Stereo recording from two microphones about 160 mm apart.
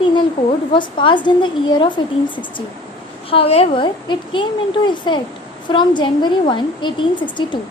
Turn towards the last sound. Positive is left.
turn(degrees=30)  # may be behind; listen again after turning